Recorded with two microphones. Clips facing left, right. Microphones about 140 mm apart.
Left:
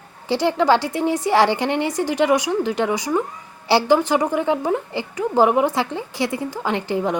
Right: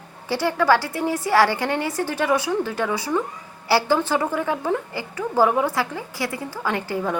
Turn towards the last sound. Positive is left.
turn(degrees=20)  # may be behind; listen again after turning